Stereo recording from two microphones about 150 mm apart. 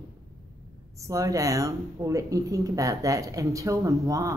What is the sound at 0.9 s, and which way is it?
Speech, 20° right (ahead or behind).